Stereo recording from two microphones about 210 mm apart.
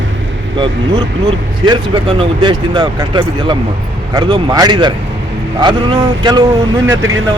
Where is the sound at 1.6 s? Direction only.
20° right (ahead or behind).